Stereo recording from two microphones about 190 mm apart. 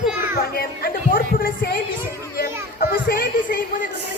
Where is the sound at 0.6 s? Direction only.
50° left (ahead or behind).